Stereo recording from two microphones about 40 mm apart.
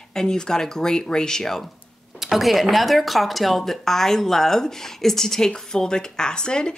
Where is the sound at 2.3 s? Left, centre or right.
Centre.